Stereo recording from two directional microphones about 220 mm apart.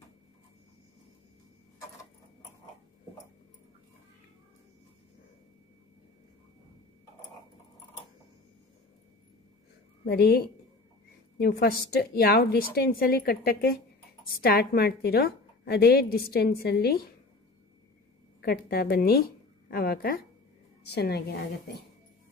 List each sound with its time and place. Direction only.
10.0 s a woman's voice: 45° left (ahead or behind)
18.4 s a woman's voice: 45° left (ahead or behind)